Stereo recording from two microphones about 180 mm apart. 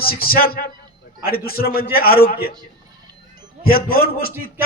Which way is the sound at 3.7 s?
55° left (ahead or behind).